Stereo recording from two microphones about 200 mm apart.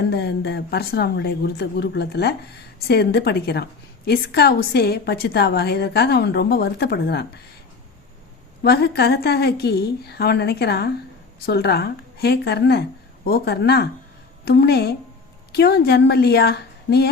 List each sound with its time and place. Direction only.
0.0 s a woman's voice: 55° left (ahead or behind)
8.6 s a woman's voice: 55° left (ahead or behind)